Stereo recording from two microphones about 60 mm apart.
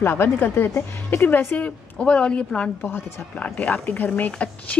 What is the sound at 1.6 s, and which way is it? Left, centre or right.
Speech, left.